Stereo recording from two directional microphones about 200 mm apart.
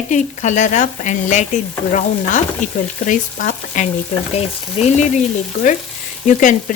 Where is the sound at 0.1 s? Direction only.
35° left (ahead or behind).